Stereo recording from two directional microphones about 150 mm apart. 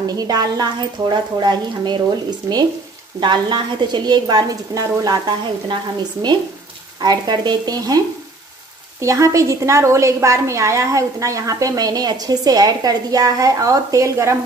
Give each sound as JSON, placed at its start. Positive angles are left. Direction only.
{"t": 0.0, "sound": "a woman's voice", "side_deg": -25}
{"t": 7.0, "sound": "a woman's voice", "side_deg": -30}
{"t": 9.0, "sound": "a woman's voice", "side_deg": -20}